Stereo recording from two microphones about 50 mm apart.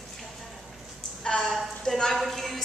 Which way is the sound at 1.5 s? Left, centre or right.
Centre.